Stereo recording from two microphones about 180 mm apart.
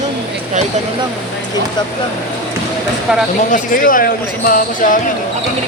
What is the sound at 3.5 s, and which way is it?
Speech, 50° left (ahead or behind).